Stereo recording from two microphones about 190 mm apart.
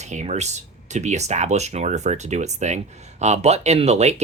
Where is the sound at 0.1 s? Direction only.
35° right (ahead or behind).